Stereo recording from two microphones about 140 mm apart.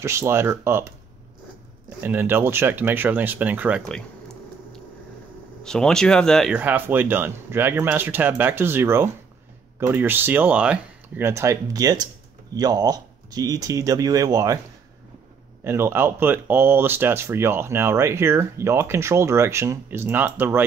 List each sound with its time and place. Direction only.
0.0 s speech: 20° right (ahead or behind)
2.0 s speech: 15° right (ahead or behind)
5.6 s speech: 5° left (ahead or behind)
6.5 s speech: 10° right (ahead or behind)
15.6 s speech: 15° right (ahead or behind)